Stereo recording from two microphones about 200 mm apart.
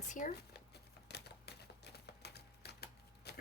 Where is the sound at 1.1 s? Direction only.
55° left (ahead or behind).